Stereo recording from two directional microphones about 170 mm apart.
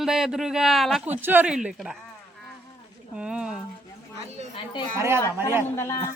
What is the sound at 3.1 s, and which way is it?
Speech, 5° right (ahead or behind).